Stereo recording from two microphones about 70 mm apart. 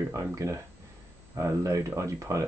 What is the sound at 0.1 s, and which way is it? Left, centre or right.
Speech, right.